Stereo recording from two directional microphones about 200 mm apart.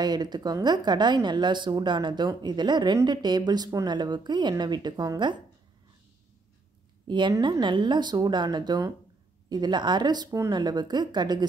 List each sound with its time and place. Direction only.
0.0 s a woman's voice: 20° right (ahead or behind)
7.1 s a woman's voice: 25° right (ahead or behind)